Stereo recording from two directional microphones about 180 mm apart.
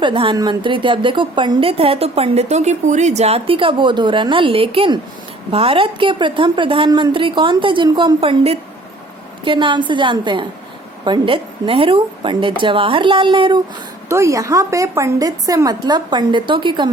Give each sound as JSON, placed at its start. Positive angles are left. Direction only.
{"t": 0.0, "sound": "a woman's voice", "side_deg": -30}
{"t": 14.1, "sound": "a woman's voice", "side_deg": -15}